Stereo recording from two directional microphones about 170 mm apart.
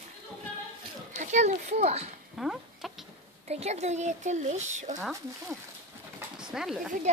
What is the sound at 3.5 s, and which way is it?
Speech, 40° right (ahead or behind).